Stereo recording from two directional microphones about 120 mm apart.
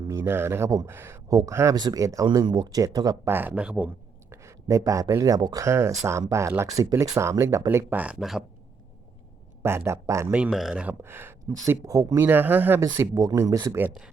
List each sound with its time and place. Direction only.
0.1 s speech: 20° right (ahead or behind)
3.2 s speech: 15° right (ahead or behind)
4.3 s speech: 25° right (ahead or behind); by 8.4 s 5° right (ahead or behind)
9.6 s speech: 20° right (ahead or behind)
10.5 s speech: 5° right (ahead or behind)
11.0 s speech: 20° right (ahead or behind)
12.8 s speech: 30° right (ahead or behind)